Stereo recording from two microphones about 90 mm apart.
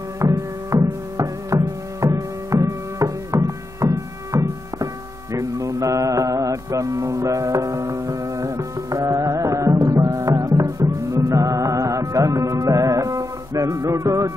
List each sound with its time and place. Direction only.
0.2 s music: 40° right (ahead or behind)
5.3 s mantra: 40° right (ahead or behind)
11.2 s music: 40° right (ahead or behind)